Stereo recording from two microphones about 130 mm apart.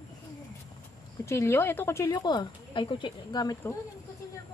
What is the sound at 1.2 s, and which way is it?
Speech, 20° left (ahead or behind).